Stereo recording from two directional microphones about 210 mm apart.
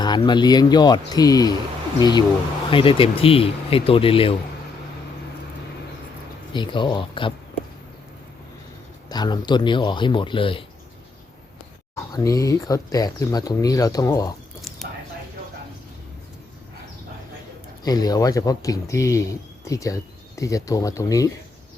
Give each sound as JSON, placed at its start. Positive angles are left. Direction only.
{"t": 0.0, "sound": "speech", "side_deg": 20}
{"t": 6.5, "sound": "speech", "side_deg": 20}
{"t": 9.0, "sound": "speech", "side_deg": 20}
{"t": 12.1, "sound": "speech", "side_deg": 15}
{"t": 17.8, "sound": "speech", "side_deg": 20}